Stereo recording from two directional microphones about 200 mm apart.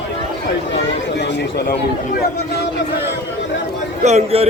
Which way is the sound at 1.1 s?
60° left (ahead or behind).